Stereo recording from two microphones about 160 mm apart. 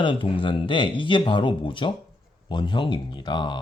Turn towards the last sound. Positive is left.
turn(degrees=30)  # may be behind; listen again after turning